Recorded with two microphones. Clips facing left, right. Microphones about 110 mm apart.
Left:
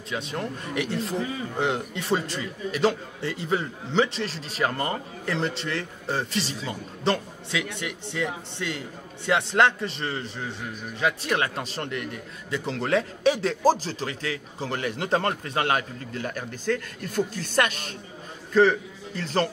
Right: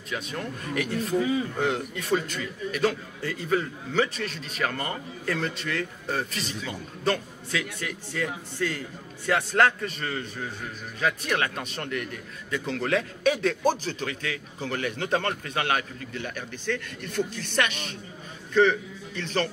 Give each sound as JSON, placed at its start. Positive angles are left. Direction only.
{"t": 0.1, "sound": "a man's voice", "side_deg": 30}